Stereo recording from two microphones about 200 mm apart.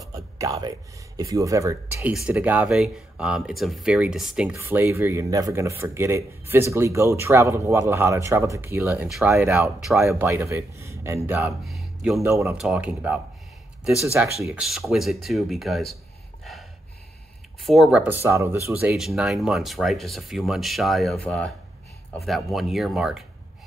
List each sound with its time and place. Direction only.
0.1 s a sound: 15° right (ahead or behind)
2.1 s speech: 5° right (ahead or behind)
12.2 s speech: 15° right (ahead or behind)
12.5 s speech: 5° right (ahead or behind)
14.4 s speech: 5° right (ahead or behind)
17.6 s speech: centre (ahead or behind)